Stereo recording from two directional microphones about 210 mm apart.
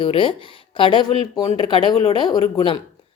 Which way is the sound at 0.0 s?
25° left (ahead or behind).